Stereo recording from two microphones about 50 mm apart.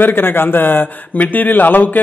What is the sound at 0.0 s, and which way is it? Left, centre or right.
Speech, left.